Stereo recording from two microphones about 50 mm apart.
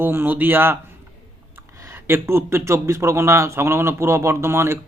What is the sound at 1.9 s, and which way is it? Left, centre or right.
A man's voice, right.